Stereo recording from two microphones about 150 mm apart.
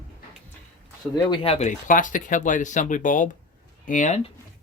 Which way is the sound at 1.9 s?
60° left (ahead or behind).